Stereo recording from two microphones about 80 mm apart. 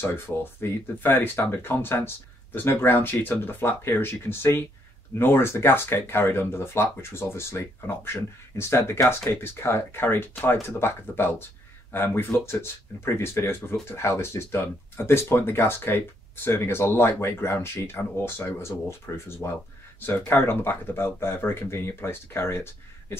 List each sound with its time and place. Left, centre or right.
0.0 s speech: left